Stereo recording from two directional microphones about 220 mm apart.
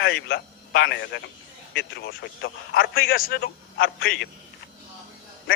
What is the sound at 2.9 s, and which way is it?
Speech, 45° left (ahead or behind).